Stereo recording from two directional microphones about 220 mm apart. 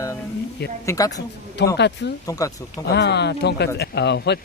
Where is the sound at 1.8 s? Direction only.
50° left (ahead or behind).